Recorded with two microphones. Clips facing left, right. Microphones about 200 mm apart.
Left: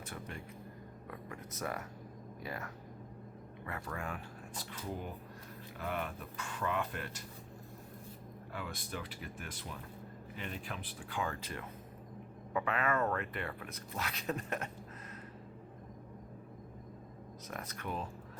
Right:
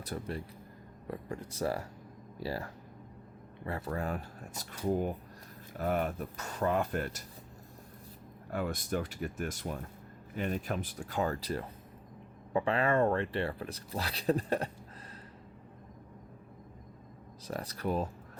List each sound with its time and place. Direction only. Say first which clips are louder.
0.0 s speech: right 7 dB; 35° right (ahead or behind)
8.4 s speech: right 10 dB; 45° right (ahead or behind)
17.5 s speech: right 8 dB; 35° right (ahead or behind)